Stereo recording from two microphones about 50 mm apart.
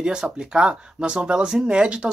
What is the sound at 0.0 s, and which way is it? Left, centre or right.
Speech, centre.